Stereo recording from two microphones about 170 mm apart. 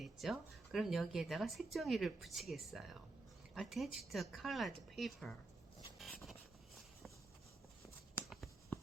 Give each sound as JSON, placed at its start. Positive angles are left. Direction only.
{"t": 0.0, "sound": "a woman's voice", "side_deg": 0}
{"t": 6.0, "sound": "vehicle", "side_deg": 0}
{"t": 8.3, "sound": "a sound", "side_deg": 0}